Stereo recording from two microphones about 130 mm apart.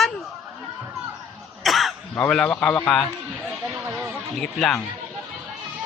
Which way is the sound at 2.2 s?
5° left (ahead or behind).